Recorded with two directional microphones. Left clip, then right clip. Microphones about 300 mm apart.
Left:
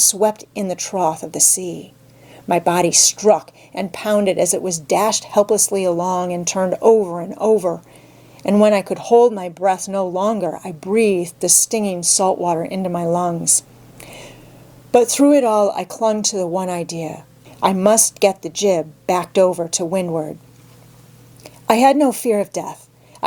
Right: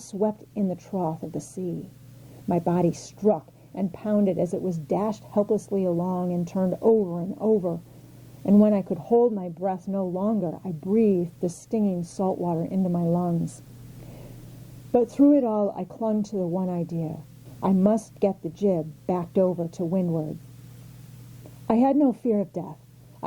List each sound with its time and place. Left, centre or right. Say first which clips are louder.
0.0 s speech: left 11 dB; centre
2.5 s speech: left 9 dB; centre
6.7 s speech: left 8 dB; left
8.4 s speech: left 8 dB; centre
10.0 s speech: left 9 dB; left
10.2 s a woman's voice: left 9 dB; centre
12.3 s speech: left 9 dB; centre
13.4 s a woman's voice: left 16 dB; centre
14.9 s a woman's voice: left 7 dB; centre
21.7 s a woman's voice: left 9 dB; centre